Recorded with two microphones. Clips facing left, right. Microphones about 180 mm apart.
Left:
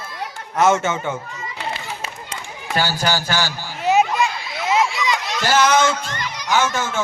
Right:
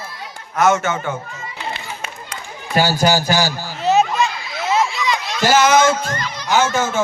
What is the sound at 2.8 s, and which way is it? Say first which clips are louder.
Speech: right 7 dB; 40° right (ahead or behind).